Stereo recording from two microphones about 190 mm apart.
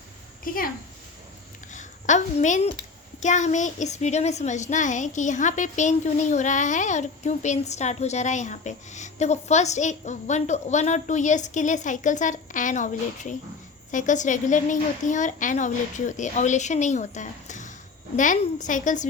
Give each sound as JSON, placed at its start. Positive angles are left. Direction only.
{"t": 0.4, "sound": "a woman's voice", "side_deg": 50}
{"t": 1.7, "sound": "a woman's voice", "side_deg": 40}